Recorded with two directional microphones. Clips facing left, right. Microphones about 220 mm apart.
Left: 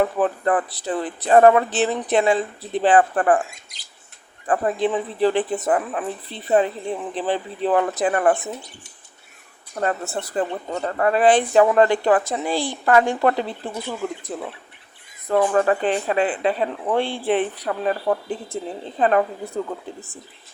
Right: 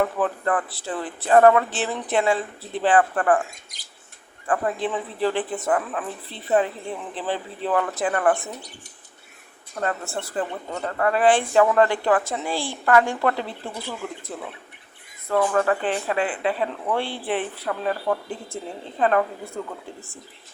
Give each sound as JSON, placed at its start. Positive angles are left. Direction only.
{"t": 0.0, "sound": "speech", "side_deg": 20}
{"t": 4.4, "sound": "speech", "side_deg": 20}
{"t": 9.8, "sound": "speech", "side_deg": 20}